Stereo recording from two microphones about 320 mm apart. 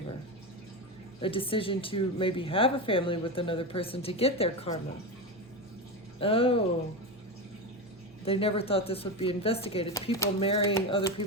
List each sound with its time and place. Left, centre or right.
1.2 s speech: centre
6.1 s speech: centre
8.2 s speech: centre